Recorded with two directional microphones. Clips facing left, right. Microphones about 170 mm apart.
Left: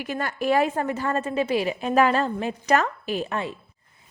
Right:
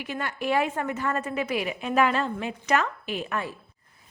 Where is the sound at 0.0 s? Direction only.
40° left (ahead or behind).